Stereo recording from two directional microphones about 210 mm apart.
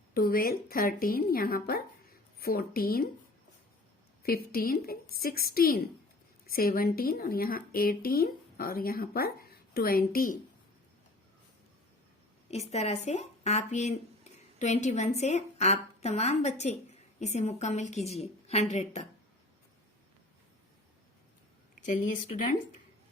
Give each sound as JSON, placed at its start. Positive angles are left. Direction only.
{"t": 0.1, "sound": "a woman's voice", "side_deg": 45}
{"t": 4.2, "sound": "a woman's voice", "side_deg": 45}
{"t": 12.5, "sound": "a woman's voice", "side_deg": 30}
{"t": 21.8, "sound": "a woman's voice", "side_deg": 40}